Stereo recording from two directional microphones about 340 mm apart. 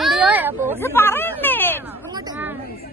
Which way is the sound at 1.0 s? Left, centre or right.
Centre.